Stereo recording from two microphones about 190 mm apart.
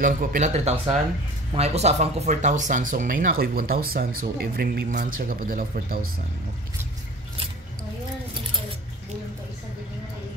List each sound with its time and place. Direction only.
0.0 s speech: 45° right (ahead or behind)